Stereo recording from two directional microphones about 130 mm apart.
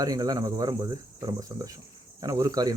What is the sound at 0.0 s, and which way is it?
Speech, 25° right (ahead or behind).